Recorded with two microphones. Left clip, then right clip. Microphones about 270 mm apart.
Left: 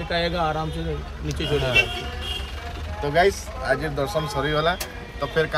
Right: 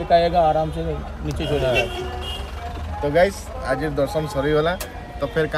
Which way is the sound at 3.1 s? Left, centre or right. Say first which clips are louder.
Right 1 dB; centre.